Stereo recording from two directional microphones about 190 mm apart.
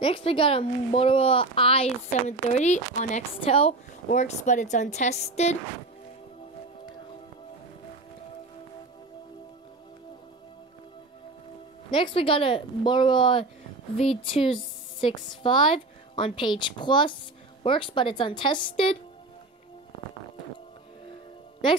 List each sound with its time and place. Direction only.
0.0 s a woman's voice: 30° left (ahead or behind)
11.9 s a woman's voice: 25° left (ahead or behind)